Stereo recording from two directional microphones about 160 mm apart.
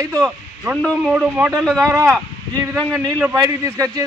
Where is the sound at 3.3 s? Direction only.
20° right (ahead or behind).